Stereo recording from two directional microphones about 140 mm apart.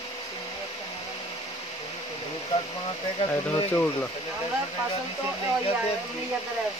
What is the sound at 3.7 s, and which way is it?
Speech, 10° left (ahead or behind).